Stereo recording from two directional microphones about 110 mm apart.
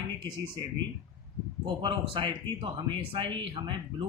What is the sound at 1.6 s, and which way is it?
Speech, 50° right (ahead or behind).